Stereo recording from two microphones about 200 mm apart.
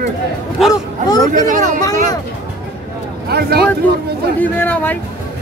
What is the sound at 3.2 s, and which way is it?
Speech, 55° right (ahead or behind).